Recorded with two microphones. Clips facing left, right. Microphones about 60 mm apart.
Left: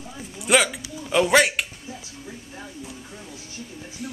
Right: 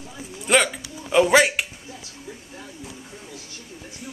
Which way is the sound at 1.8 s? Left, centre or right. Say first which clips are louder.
Left 1 dB; centre.